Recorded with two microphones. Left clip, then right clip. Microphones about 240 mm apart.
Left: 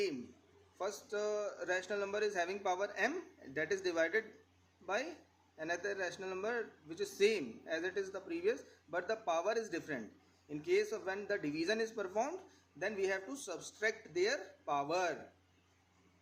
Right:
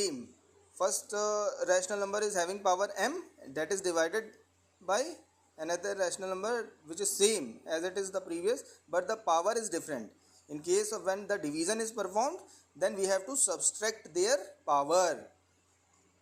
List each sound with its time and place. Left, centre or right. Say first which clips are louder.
0.8 s speech: right 7 dB; centre